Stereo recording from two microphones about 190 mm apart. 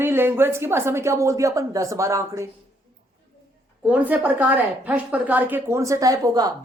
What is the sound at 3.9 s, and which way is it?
Speech, 10° right (ahead or behind).